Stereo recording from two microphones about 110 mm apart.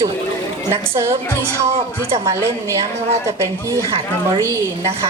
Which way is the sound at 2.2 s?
25° right (ahead or behind).